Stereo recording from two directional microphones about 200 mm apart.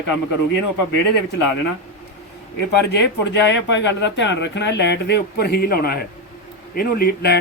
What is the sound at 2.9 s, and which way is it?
Speech, 60° left (ahead or behind).